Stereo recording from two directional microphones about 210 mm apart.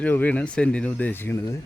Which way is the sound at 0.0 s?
5° left (ahead or behind).